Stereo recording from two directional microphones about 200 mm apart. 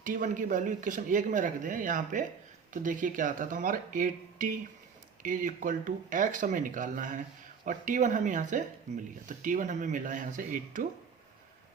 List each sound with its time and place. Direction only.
0.0 s speech: 40° right (ahead or behind)